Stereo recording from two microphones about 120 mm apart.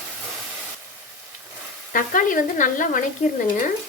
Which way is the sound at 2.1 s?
90° left.